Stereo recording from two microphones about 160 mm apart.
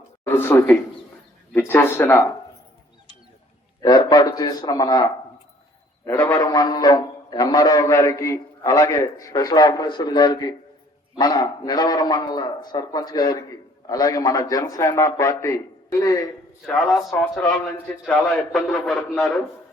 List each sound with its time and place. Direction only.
0.3 s speech: 15° left (ahead or behind)
3.8 s a man's voice: 25° left (ahead or behind)
16.6 s a man's voice: centre (ahead or behind)